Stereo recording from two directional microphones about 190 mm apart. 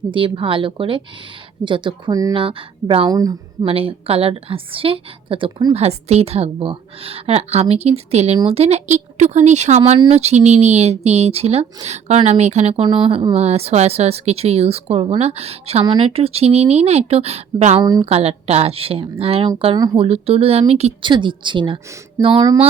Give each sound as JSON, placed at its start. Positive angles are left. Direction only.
{"t": 0.1, "sound": "speech", "side_deg": -25}
{"t": 3.7, "sound": "speech", "side_deg": -30}